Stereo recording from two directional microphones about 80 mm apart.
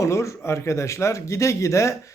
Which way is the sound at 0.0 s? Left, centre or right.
Left.